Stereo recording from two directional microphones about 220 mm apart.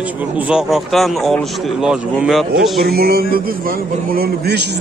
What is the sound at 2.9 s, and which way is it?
A man's voice, 45° right (ahead or behind).